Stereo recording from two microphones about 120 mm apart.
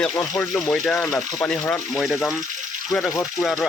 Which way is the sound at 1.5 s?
10° left (ahead or behind).